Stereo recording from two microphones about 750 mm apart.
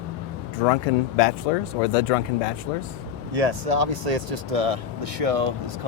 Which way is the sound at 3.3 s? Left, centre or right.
Right.